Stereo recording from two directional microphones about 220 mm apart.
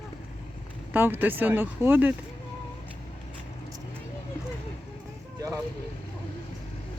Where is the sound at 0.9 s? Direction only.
10° right (ahead or behind).